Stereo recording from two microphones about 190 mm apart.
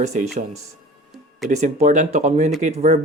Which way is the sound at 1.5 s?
40° right (ahead or behind).